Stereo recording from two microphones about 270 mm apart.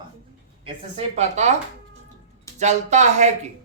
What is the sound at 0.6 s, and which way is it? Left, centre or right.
Speech, right.